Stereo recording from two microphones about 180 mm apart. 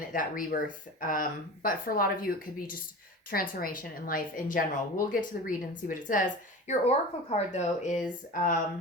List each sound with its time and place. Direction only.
0.1 s speech: 50° left (ahead or behind)